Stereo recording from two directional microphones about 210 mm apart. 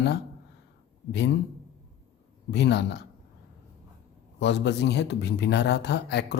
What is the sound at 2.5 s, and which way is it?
Speech, 55° left (ahead or behind).